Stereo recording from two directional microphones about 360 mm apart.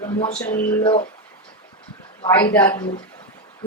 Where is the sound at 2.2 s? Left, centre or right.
Centre.